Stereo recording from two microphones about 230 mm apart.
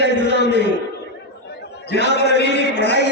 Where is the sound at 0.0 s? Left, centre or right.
Left.